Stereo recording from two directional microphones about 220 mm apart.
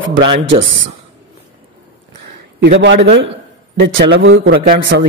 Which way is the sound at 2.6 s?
50° right (ahead or behind).